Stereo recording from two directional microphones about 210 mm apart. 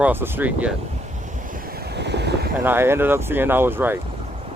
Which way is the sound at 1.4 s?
40° right (ahead or behind).